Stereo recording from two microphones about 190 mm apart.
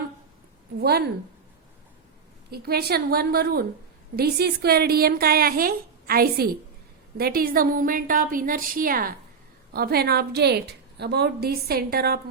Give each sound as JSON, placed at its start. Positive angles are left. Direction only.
{"t": 0.8, "sound": "a woman's voice", "side_deg": -55}
{"t": 2.5, "sound": "a woman's voice", "side_deg": -55}